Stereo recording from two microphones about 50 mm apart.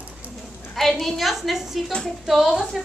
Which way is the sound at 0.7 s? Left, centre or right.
Centre.